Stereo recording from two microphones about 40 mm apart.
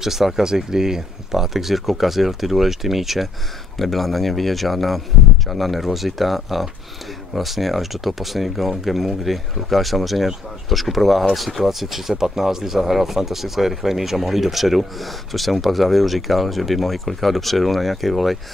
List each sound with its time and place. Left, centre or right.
0.0 s speech: centre